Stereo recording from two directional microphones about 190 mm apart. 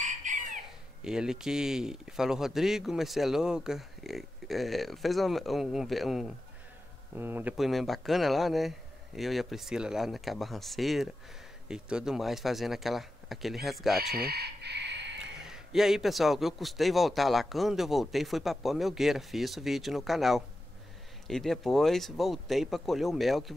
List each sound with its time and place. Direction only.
0.0 s chicken: 40° right (ahead or behind)
1.0 s a man's voice: 5° right (ahead or behind)
13.9 s chicken: 55° right (ahead or behind)
15.1 s a man's voice: 5° right (ahead or behind)